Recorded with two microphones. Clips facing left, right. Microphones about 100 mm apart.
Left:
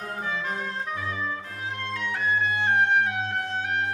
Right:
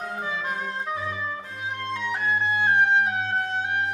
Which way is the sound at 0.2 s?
20° right (ahead or behind).